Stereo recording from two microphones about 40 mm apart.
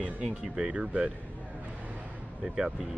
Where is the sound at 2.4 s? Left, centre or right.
Centre.